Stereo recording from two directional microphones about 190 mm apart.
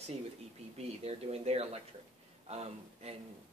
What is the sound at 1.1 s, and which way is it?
Speech, 35° right (ahead or behind).